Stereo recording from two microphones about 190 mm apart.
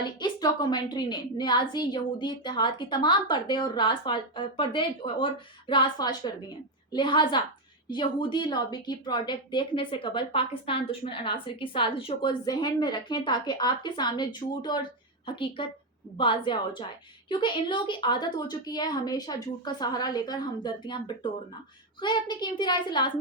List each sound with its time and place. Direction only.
0.0 s a woman's voice: 20° left (ahead or behind)